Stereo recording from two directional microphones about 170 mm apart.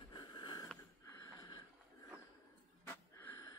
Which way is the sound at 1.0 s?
20° left (ahead or behind).